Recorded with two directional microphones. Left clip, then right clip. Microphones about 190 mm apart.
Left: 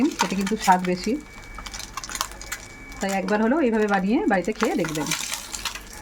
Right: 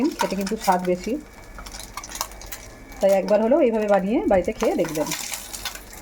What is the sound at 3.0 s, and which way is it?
Speech, 35° left (ahead or behind).